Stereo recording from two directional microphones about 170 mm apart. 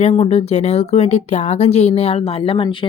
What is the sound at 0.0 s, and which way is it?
Speech, 40° left (ahead or behind).